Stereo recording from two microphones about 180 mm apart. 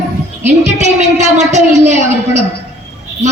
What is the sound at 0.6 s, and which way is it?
A woman's voice, 40° right (ahead or behind).